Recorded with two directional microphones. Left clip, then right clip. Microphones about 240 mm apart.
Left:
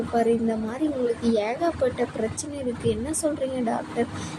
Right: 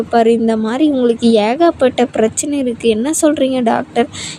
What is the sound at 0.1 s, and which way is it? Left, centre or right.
Speech, right.